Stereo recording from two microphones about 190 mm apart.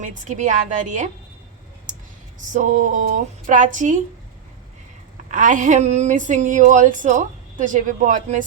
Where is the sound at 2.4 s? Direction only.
40° right (ahead or behind).